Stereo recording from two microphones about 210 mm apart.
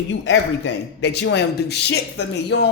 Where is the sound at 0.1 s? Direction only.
60° left (ahead or behind).